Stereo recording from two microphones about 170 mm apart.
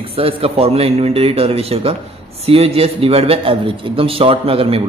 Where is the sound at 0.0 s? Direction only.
35° right (ahead or behind).